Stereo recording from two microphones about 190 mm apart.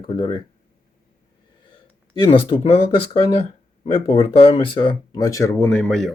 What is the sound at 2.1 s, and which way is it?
Speech, 35° left (ahead or behind).